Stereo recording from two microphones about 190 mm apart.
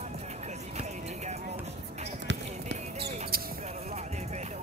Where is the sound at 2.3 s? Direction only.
65° right (ahead or behind).